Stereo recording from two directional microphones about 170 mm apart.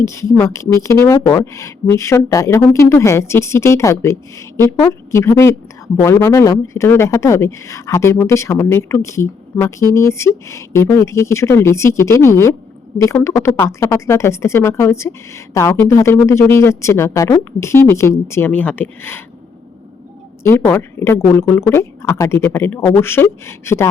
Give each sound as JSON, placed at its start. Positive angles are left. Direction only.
{"t": 0.0, "sound": "speech", "side_deg": 15}
{"t": 20.4, "sound": "speech", "side_deg": 15}